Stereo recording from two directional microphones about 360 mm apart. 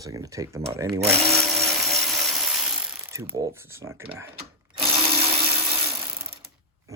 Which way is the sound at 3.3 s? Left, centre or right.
Centre.